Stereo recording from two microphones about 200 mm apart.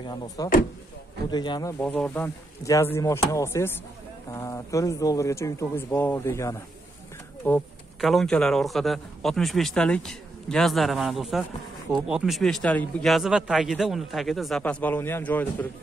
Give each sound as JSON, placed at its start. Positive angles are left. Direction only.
{"t": 0.0, "sound": "speech", "side_deg": 20}
{"t": 1.8, "sound": "a man's voice", "side_deg": 5}